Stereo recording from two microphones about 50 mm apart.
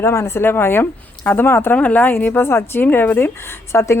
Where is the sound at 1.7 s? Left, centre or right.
Left.